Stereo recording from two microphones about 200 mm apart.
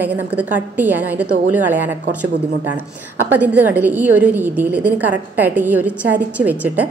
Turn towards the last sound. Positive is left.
turn(degrees=-10)  # may be behind; listen again after turning